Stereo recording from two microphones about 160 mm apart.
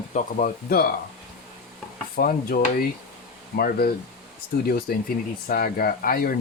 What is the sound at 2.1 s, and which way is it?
Speech, 65° left (ahead or behind).